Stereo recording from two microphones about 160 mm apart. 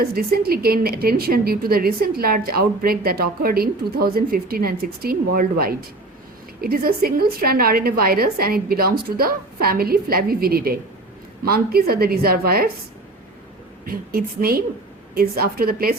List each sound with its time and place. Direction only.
0.0 s a woman's voice: 75° right (ahead or behind)
13.8 s a woman's voice: 65° right (ahead or behind)